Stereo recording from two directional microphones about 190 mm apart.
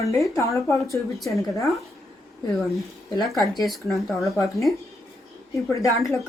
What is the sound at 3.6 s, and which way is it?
Speech, centre (ahead or behind).